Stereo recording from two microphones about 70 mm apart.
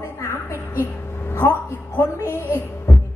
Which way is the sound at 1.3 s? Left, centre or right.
Left.